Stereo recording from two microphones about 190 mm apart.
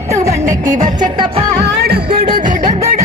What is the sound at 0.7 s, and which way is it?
Music, 40° right (ahead or behind).